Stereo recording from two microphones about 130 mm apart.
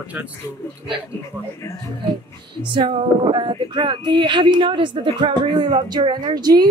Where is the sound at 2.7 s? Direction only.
40° right (ahead or behind).